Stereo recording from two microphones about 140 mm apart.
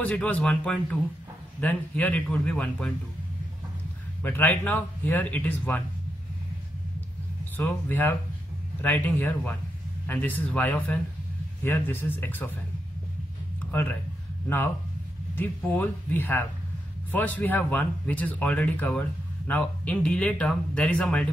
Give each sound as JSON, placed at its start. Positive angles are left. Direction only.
{"t": 0.0, "sound": "speech", "side_deg": 10}
{"t": 4.2, "sound": "speech", "side_deg": 15}
{"t": 7.5, "sound": "speech", "side_deg": 15}
{"t": 13.6, "sound": "a sound", "side_deg": 15}
{"t": 15.3, "sound": "speech", "side_deg": 15}